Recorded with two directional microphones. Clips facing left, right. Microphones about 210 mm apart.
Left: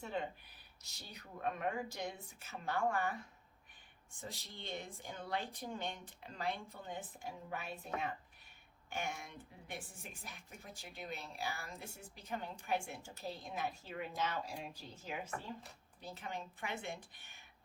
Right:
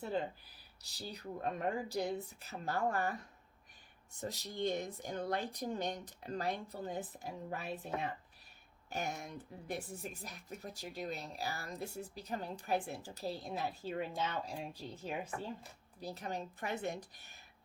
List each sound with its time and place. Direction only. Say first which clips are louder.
0.0 s speech: right 4 dB; 35° right (ahead or behind)
8.9 s speech: right 3 dB; 40° right (ahead or behind)